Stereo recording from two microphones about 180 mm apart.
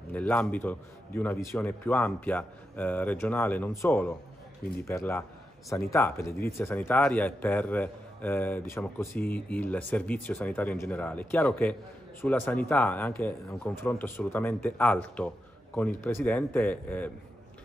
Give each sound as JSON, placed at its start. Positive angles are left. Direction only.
{"t": 0.1, "sound": "a man's voice", "side_deg": 5}